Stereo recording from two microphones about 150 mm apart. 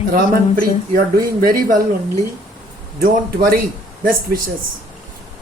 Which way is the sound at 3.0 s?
70° right (ahead or behind).